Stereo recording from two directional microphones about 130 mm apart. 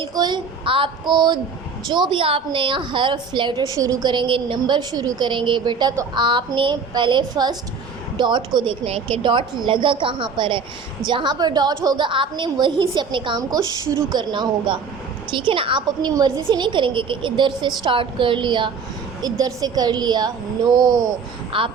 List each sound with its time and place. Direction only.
0.0 s a woman's voice: 35° right (ahead or behind)
3.7 s a woman's voice: 30° right (ahead or behind)
21.5 s a woman's voice: 40° right (ahead or behind)